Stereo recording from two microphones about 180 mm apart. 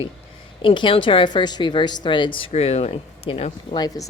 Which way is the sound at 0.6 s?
25° left (ahead or behind).